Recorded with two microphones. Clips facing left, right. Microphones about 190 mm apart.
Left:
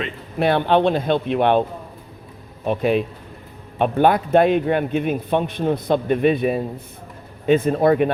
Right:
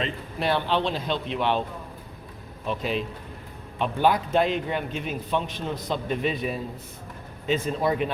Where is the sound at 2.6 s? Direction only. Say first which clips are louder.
Left 9 dB; 55° left (ahead or behind).